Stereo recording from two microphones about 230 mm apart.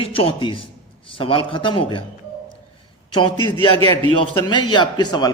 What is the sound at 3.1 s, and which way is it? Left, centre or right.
A man's voice, left.